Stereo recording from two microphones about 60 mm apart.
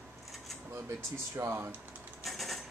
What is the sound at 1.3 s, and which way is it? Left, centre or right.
Speech, right.